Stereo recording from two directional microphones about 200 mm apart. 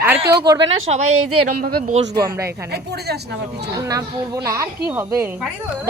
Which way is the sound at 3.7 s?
15° right (ahead or behind).